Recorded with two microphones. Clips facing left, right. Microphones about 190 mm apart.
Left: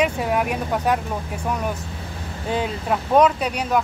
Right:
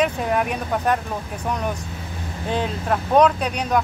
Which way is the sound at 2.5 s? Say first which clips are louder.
Even; 10° left (ahead or behind).